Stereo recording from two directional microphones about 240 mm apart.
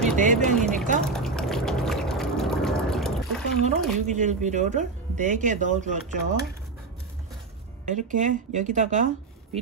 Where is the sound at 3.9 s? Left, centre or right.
Right.